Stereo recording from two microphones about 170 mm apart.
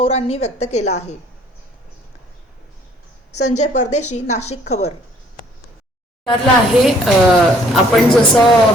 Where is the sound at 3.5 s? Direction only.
45° left (ahead or behind).